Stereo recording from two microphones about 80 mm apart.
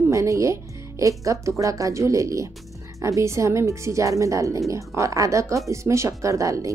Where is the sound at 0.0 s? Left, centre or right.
Right.